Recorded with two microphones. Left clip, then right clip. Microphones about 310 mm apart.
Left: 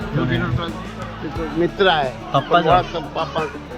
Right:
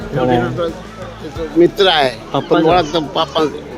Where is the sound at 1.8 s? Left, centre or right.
Right.